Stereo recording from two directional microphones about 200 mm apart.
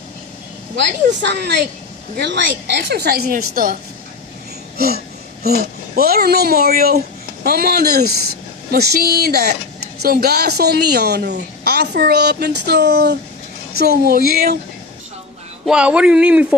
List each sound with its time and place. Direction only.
1.2 s a woman's voice: 55° right (ahead or behind)
15.6 s speech: 5° right (ahead or behind)